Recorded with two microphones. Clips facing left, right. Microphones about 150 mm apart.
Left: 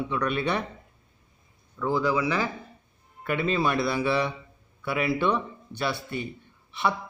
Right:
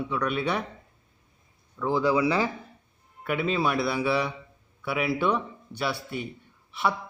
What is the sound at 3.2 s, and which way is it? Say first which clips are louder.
A man's voice: left 1 dB; 5° right (ahead or behind).